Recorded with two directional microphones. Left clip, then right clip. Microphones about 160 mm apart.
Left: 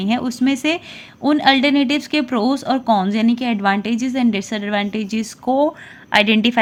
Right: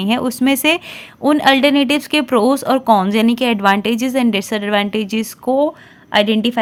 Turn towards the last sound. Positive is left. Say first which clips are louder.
# even
turn(degrees=-15)  # may be behind; listen again after turning